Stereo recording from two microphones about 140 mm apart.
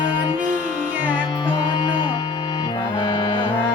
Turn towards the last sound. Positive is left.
turn(degrees=30)  # may be behind; listen again after turning